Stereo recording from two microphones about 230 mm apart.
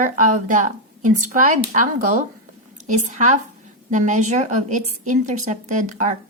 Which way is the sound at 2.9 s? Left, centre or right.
Right.